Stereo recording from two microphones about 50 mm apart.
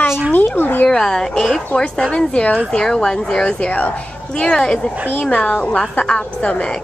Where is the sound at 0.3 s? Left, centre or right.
Left.